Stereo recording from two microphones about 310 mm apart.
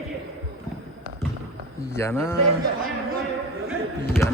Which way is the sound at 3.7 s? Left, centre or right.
Centre.